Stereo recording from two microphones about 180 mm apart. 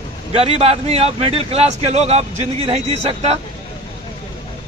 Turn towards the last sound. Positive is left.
turn(degrees=-35)  # may be behind; listen again after turning